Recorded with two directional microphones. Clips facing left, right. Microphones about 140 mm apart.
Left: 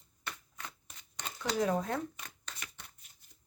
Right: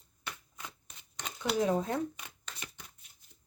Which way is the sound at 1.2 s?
15° right (ahead or behind).